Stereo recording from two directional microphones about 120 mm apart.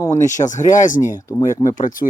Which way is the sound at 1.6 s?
90° left.